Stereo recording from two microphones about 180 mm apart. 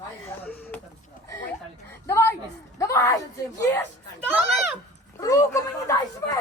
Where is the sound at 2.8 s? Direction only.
15° left (ahead or behind).